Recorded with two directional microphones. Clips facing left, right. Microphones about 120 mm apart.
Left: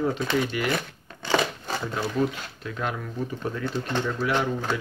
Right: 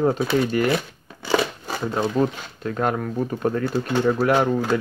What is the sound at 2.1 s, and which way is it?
Speech, 40° right (ahead or behind).